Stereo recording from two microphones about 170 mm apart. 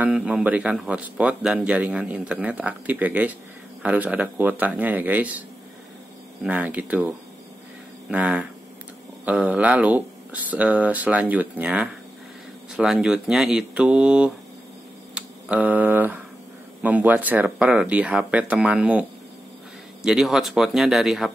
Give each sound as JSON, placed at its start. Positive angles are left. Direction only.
{"t": 0.0, "sound": "speech", "side_deg": -5}
{"t": 6.4, "sound": "speech", "side_deg": -10}